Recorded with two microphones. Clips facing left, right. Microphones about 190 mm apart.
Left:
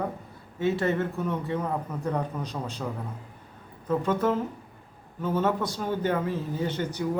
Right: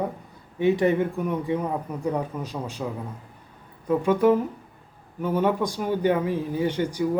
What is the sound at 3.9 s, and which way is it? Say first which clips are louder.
Speech: right 5 dB; 10° right (ahead or behind).